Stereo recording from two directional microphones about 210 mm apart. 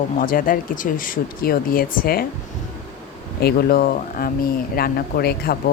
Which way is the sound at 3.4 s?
45° left (ahead or behind).